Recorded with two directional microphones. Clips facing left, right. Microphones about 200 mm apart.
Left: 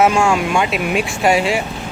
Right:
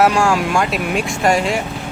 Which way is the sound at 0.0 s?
Centre (ahead or behind).